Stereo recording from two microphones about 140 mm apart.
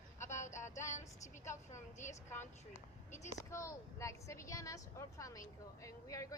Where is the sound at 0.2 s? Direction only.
60° left (ahead or behind).